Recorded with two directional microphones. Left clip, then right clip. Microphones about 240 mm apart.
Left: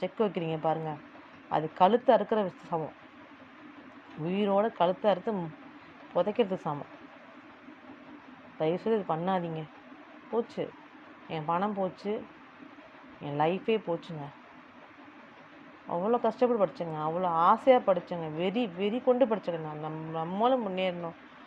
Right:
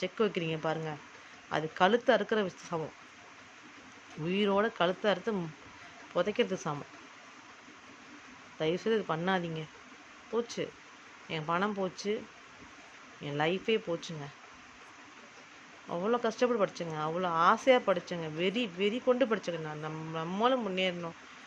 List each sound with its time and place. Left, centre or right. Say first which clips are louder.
0.0 s speech: left 1 dB; centre
4.3 s speech: left 2 dB; centre
8.5 s speech: left 2 dB; centre
13.2 s speech: left 3 dB; centre
15.9 s speech: left 3 dB; centre